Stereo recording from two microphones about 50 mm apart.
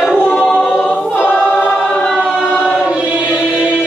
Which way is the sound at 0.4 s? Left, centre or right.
Centre.